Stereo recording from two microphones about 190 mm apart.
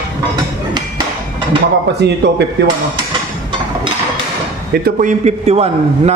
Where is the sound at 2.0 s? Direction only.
60° right (ahead or behind).